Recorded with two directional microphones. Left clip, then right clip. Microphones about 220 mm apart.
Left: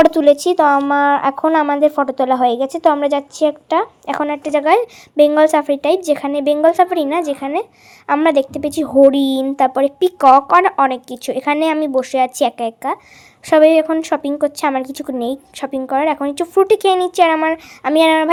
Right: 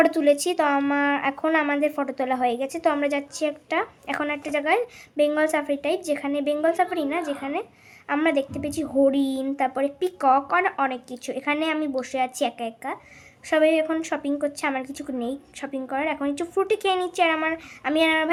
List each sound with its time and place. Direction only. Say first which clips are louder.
0.0 s a woman's voice: left 9 dB; 30° left (ahead or behind)